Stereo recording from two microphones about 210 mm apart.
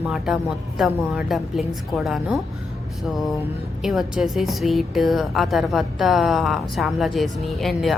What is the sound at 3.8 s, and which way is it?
A woman's voice, centre (ahead or behind).